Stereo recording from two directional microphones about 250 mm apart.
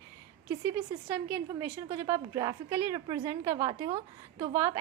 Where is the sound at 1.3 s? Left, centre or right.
Centre.